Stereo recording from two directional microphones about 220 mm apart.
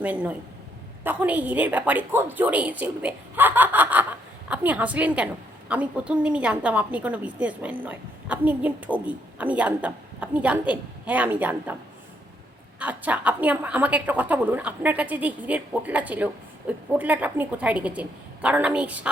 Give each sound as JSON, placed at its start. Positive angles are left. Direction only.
{"t": 0.0, "sound": "a woman's voice", "side_deg": -5}
{"t": 12.8, "sound": "a woman's voice", "side_deg": -5}